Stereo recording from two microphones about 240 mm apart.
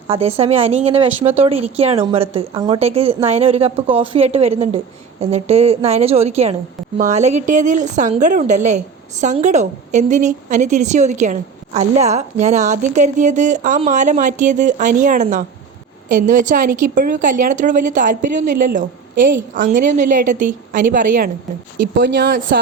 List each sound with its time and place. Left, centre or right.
0.1 s a woman's voice: right
21.8 s speech: right